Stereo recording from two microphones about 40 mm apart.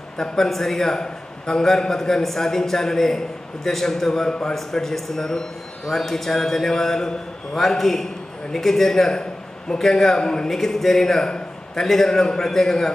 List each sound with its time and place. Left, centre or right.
0.2 s a man's voice: centre
10.2 s a man's voice: centre
10.5 s a man's voice: centre